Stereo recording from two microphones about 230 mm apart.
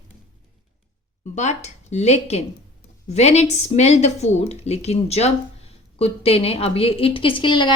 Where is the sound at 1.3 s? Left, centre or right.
Left.